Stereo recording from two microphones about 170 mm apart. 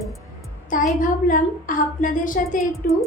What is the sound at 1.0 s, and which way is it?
A woman's voice, 50° left (ahead or behind).